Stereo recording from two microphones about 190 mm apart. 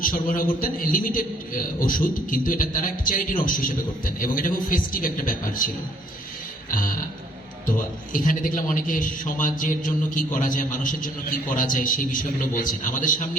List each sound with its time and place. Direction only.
0.0 s a man's voice: 45° left (ahead or behind)